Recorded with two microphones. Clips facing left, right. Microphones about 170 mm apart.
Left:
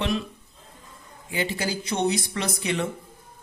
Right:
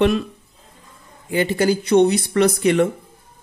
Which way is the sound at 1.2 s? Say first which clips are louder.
Right 10 dB; 55° right (ahead or behind).